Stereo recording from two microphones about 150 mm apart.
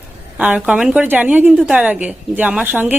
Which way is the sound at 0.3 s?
10° right (ahead or behind).